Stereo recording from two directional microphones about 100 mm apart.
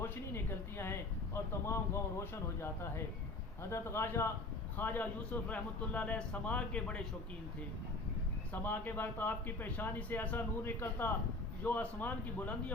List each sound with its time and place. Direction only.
0.0 s a sound: 25° left (ahead or behind)
3.6 s a man's voice: 25° left (ahead or behind)
8.5 s a man's voice: 20° left (ahead or behind)